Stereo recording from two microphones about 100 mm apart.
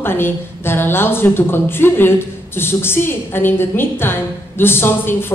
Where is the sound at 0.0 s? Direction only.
20° left (ahead or behind).